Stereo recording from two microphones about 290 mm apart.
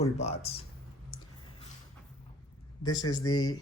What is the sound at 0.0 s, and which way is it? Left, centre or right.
Speech, left.